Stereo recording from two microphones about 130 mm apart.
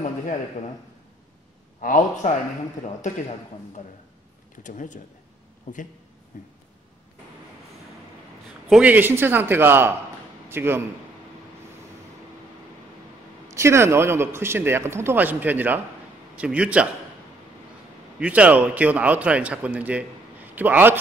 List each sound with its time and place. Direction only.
1.8 s a man's voice: 90° left
2.8 s a man's voice: 65° left (ahead or behind)
4.6 s speech: 80° left
6.3 s a sound: 75° left (ahead or behind)
8.6 s a man's voice: 10° right (ahead or behind)
13.6 s a man's voice: 20° right (ahead or behind)
18.2 s a man's voice: 10° right (ahead or behind)